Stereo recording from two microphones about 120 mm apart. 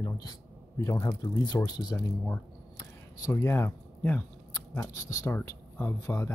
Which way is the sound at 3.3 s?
20° left (ahead or behind).